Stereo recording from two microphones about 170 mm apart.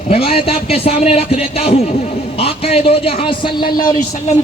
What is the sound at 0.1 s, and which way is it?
A man's voice, 35° left (ahead or behind).